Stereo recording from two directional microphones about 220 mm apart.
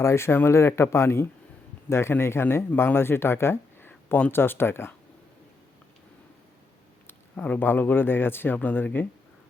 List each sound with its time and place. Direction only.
0.0 s speech: 10° left (ahead or behind)
7.1 s speech: 5° left (ahead or behind)